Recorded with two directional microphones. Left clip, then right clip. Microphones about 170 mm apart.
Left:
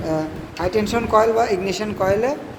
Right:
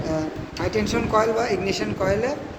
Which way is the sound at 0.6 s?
45° left (ahead or behind).